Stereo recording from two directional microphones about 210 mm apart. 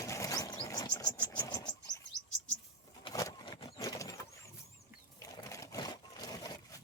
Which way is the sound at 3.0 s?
15° left (ahead or behind).